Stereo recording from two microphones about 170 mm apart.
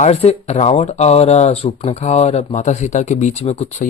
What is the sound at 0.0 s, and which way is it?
Speech, 40° left (ahead or behind).